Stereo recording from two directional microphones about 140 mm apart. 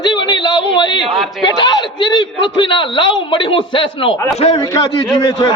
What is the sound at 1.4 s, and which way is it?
A man's voice, 30° left (ahead or behind).